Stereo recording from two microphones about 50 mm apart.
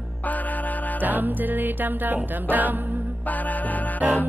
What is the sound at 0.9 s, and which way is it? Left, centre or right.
Music, right.